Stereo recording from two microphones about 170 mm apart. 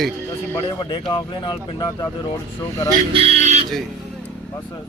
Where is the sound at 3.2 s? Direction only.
40° right (ahead or behind).